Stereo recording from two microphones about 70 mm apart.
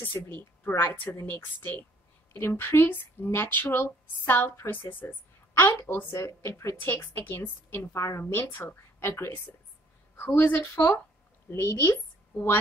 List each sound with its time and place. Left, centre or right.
0.0 s a woman's voice: left
6.8 s a woman's voice: left